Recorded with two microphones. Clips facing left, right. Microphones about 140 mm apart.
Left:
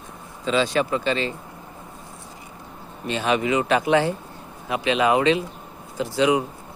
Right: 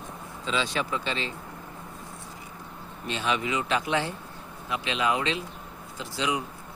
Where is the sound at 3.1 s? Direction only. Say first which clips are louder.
Left 7 dB; 55° left (ahead or behind).